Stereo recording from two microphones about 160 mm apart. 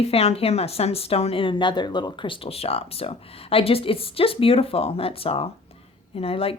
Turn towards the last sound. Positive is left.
turn(degrees=35)  # may be behind; listen again after turning